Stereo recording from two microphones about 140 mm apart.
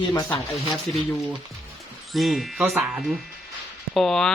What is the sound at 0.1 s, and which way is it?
Speech, 20° left (ahead or behind).